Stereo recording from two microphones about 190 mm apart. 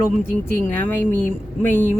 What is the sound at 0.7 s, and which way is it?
Speech, 10° left (ahead or behind).